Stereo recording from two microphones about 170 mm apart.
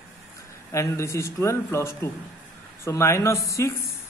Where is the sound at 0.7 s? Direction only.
15° left (ahead or behind).